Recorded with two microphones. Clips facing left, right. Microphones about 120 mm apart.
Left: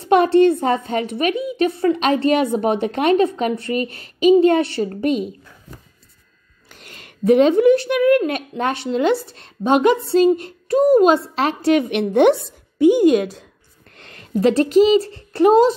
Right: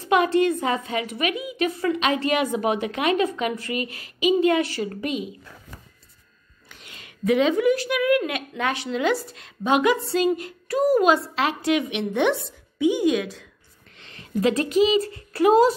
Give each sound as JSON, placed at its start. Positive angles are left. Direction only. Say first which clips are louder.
{"t": 0.0, "sound": "speech", "louder": "left 6 dB", "side_deg": 35}
{"t": 6.8, "sound": "a child's voice", "louder": "left 5 dB", "side_deg": 45}
{"t": 13.9, "sound": "a sound", "louder": "left 3 dB", "side_deg": 50}
{"t": 14.4, "sound": "speech", "louder": "left 6 dB", "side_deg": 35}